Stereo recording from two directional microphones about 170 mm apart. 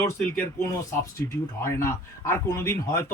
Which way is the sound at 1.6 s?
15° left (ahead or behind).